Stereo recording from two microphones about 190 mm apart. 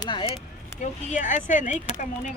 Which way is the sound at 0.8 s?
40° left (ahead or behind).